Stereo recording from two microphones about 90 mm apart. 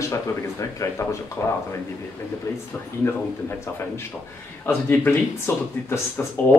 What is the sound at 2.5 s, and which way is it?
Speech, 30° left (ahead or behind).